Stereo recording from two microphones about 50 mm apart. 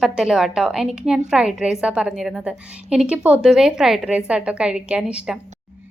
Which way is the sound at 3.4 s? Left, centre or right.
Centre.